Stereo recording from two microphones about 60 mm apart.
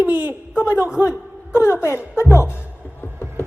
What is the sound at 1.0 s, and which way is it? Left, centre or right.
Music, right.